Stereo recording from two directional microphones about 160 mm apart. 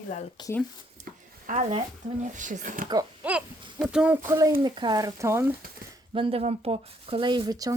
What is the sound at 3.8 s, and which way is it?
Speech, 5° right (ahead or behind).